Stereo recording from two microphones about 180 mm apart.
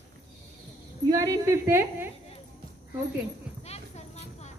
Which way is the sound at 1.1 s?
20° right (ahead or behind).